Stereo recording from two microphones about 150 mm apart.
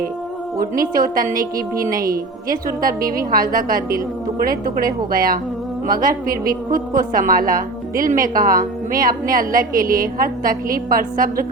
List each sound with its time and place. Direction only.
0.6 s a woman's voice: 70° right (ahead or behind)